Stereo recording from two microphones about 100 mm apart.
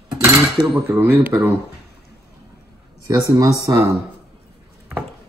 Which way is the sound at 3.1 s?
40° right (ahead or behind).